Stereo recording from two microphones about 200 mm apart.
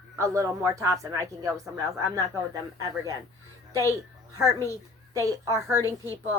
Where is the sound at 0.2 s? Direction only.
15° right (ahead or behind).